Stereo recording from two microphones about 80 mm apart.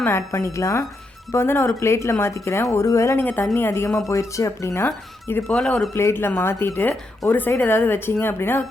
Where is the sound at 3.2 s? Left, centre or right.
Left.